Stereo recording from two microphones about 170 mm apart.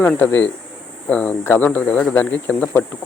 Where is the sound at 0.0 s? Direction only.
10° left (ahead or behind).